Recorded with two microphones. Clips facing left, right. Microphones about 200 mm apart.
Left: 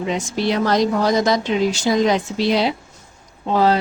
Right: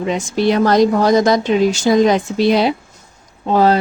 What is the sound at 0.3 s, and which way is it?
A woman's voice, 50° right (ahead or behind).